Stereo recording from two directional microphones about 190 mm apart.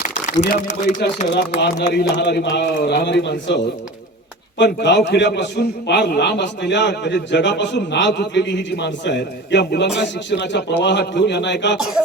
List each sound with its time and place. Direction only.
0.0 s a sound: 40° left (ahead or behind)
0.5 s a man's voice: 40° left (ahead or behind)
1.3 s a man's voice: 60° left (ahead or behind)